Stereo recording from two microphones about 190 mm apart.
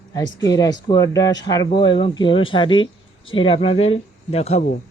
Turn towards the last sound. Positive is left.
turn(degrees=35)  # may be behind; listen again after turning